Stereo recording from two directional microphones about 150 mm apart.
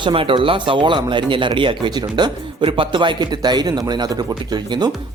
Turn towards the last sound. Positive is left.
turn(degrees=-25)  # may be behind; listen again after turning